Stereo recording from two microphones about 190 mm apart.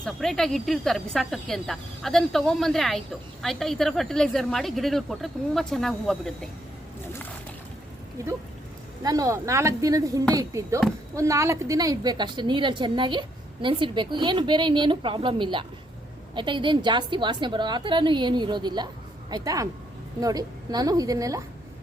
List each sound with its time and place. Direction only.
0.0 s speech: centre (ahead or behind)
9.0 s a woman's voice: 20° right (ahead or behind)